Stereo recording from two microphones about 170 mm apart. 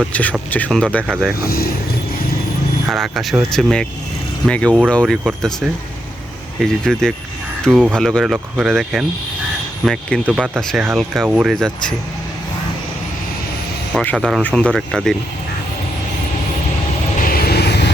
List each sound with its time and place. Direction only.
0.1 s speech: 10° left (ahead or behind)
1.5 s speech: 65° left (ahead or behind)
2.9 s speech: centre (ahead or behind)
7.7 s speech: 10° right (ahead or behind)
7.9 s speech: 5° left (ahead or behind)
13.9 s speech: 5° left (ahead or behind)
17.2 s vehicle: 60° left (ahead or behind); by 17.9 s 80° left